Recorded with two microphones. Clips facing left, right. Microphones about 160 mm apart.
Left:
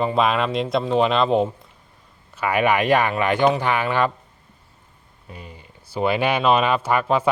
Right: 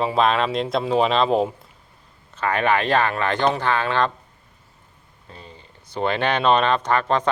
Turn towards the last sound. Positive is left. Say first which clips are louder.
# left 1 dB
turn(degrees=10)  # may be behind; listen again after turning